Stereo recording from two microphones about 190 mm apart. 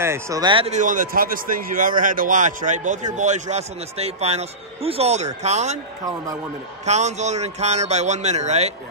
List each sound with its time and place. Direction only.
0.0 s speech: 15° right (ahead or behind); by 5.8 s 35° right (ahead or behind)
6.9 s speech: 35° right (ahead or behind)